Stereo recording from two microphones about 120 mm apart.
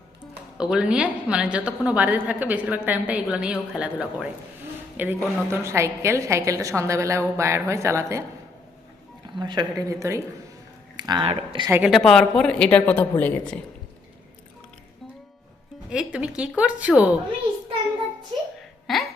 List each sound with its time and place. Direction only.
0.6 s a woman's voice: 5° right (ahead or behind); by 8.2 s 25° right (ahead or behind)
9.4 s speech: 40° right (ahead or behind)
9.9 s a woman's voice: 25° right (ahead or behind)
10.9 s a sound: 35° right (ahead or behind)
11.2 s speech: 55° right (ahead or behind)
11.9 s a woman's voice: centre (ahead or behind)
15.9 s a woman's voice: 10° right (ahead or behind)
18.9 s hiccup: centre (ahead or behind)